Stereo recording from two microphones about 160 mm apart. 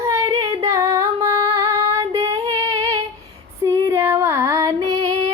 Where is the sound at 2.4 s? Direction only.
20° right (ahead or behind).